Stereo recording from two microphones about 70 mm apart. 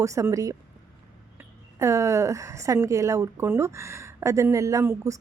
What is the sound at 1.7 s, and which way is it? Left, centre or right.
A woman's voice, right.